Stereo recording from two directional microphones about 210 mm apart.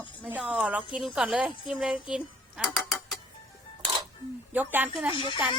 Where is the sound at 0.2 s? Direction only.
5° right (ahead or behind).